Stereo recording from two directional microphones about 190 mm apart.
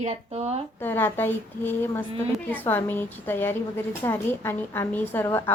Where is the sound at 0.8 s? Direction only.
10° left (ahead or behind).